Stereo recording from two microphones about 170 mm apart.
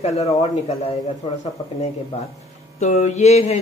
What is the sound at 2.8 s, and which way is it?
Mantra, 45° left (ahead or behind).